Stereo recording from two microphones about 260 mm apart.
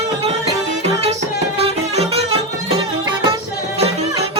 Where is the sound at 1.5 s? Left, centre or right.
Right.